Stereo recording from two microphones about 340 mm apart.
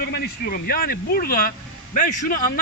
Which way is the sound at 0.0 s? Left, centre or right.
Left.